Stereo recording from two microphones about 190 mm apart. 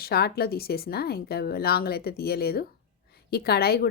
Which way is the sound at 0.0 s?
55° left (ahead or behind).